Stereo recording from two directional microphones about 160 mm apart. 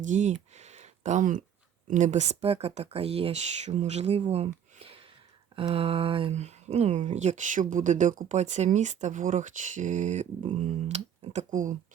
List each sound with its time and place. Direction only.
0.0 s speech: 50° right (ahead or behind)